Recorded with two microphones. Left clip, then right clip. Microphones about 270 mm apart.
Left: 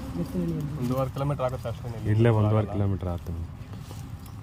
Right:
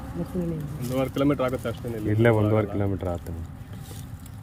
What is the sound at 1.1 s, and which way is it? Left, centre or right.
Speech, left.